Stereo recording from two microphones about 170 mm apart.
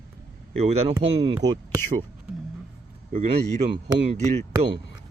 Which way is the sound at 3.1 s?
40° right (ahead or behind).